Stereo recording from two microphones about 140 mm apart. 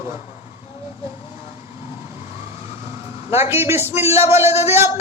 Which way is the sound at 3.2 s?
15° right (ahead or behind).